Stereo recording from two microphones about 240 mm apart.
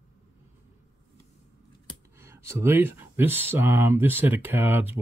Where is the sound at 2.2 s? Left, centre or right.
Centre.